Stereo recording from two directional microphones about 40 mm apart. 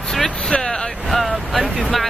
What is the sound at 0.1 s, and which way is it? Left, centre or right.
Vehicle, centre.